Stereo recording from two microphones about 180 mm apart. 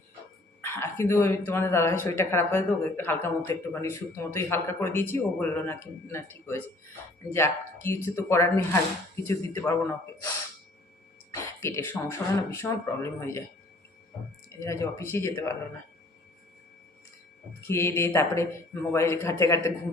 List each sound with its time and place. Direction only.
0.6 s speech: 15° left (ahead or behind)
11.6 s speech: 15° left (ahead or behind)
14.6 s speech: 15° left (ahead or behind)
17.6 s speech: 15° left (ahead or behind)